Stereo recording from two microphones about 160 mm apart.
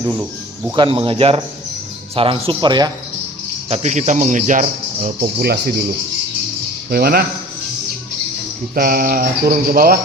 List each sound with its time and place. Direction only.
0.1 s speech: 10° right (ahead or behind)
0.8 s speech: 35° right (ahead or behind)
3.7 s speech: 50° right (ahead or behind)
5.0 s speech: 70° right (ahead or behind)
6.9 s speech: 70° right (ahead or behind)
8.7 s mantra: 65° right (ahead or behind)